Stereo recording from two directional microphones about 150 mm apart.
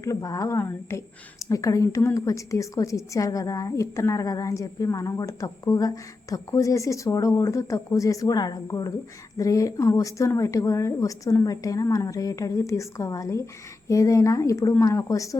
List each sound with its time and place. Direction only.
0.0 s a woman's voice: 20° left (ahead or behind)